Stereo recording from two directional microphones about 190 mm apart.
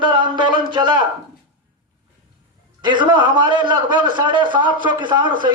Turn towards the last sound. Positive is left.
turn(degrees=-25)  # may be behind; listen again after turning